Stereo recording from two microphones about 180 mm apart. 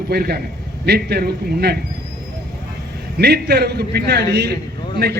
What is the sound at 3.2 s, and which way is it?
A man's voice, 65° right (ahead or behind).